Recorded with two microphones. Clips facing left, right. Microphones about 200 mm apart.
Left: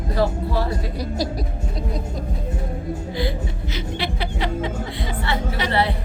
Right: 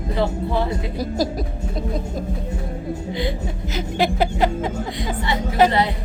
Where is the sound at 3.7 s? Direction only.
45° right (ahead or behind).